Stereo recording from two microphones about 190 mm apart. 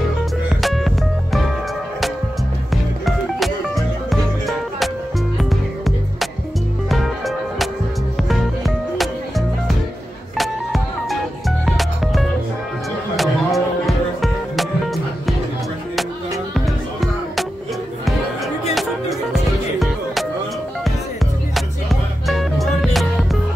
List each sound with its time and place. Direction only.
0.6 s music: centre (ahead or behind)
2.7 s music: centre (ahead or behind)
10.3 s music: centre (ahead or behind)
16.5 s music: centre (ahead or behind)
22.3 s music: centre (ahead or behind)